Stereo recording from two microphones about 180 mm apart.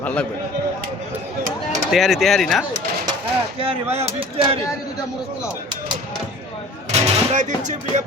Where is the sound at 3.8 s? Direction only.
15° right (ahead or behind).